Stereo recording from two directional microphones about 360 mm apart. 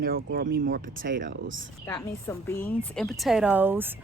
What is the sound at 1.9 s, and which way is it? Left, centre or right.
A woman's voice, centre.